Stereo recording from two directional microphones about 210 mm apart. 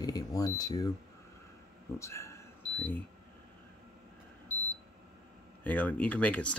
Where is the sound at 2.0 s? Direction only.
15° left (ahead or behind).